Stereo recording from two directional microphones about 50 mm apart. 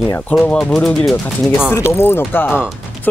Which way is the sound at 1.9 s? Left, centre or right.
Left.